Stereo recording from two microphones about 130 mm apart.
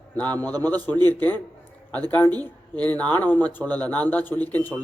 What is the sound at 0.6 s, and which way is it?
Speech, 15° left (ahead or behind).